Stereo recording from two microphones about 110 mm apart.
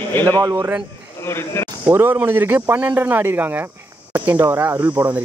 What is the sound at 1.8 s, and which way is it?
A man's voice, 20° right (ahead or behind).